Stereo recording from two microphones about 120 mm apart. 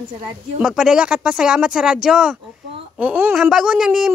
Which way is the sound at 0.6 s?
Centre (ahead or behind).